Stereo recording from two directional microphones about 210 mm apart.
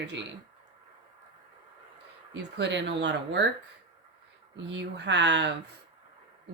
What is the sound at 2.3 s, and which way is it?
Speech, 55° right (ahead or behind).